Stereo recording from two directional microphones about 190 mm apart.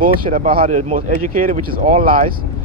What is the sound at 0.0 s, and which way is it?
Speech, 45° right (ahead or behind).